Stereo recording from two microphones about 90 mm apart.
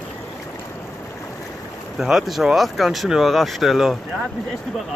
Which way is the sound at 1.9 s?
5° right (ahead or behind).